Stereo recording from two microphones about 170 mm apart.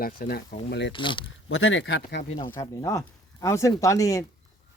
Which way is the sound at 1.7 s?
90° left.